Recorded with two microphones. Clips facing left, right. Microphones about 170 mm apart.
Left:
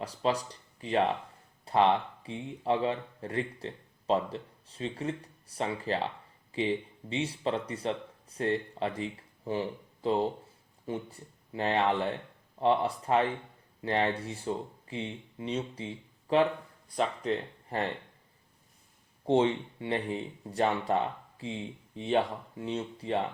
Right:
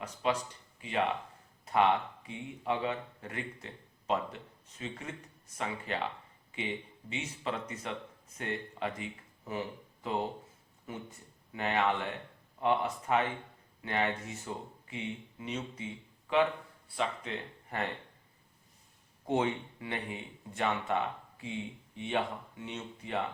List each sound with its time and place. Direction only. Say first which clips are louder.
0.0 s speech: left 3 dB; 35° left (ahead or behind)
19.2 s speech: left 5 dB; 30° left (ahead or behind)